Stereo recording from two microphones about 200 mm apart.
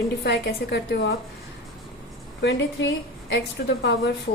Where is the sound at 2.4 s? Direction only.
60° left (ahead or behind).